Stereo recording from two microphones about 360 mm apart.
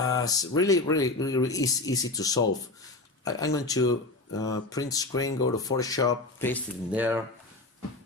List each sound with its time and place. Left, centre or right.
0.0 s speech: centre
6.9 s speech: centre